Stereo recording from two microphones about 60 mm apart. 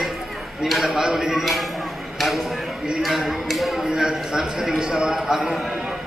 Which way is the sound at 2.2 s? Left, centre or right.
Centre.